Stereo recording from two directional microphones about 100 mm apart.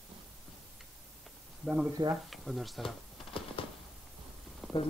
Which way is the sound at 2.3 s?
Centre (ahead or behind).